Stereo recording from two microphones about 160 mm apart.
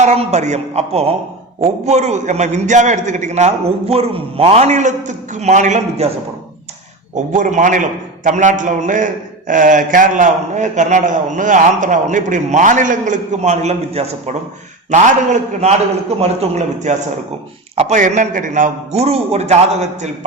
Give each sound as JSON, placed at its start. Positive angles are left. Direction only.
{"t": 0.0, "sound": "a man's voice", "side_deg": -45}
{"t": 7.3, "sound": "a man's voice", "side_deg": -50}